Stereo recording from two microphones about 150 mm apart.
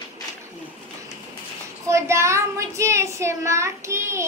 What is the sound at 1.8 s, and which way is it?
Speech, 20° right (ahead or behind).